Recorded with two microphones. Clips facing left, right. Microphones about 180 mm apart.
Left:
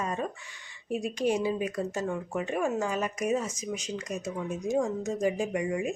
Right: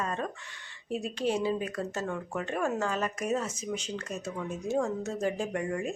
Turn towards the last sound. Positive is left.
turn(degrees=10)  # may be behind; listen again after turning